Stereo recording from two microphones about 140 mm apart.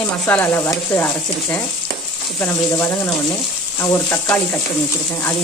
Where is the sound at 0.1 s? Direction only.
10° left (ahead or behind).